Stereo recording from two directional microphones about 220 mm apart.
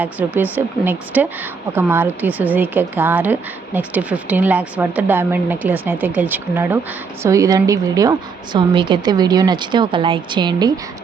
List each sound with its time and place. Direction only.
0.0 s a woman's voice: 10° right (ahead or behind)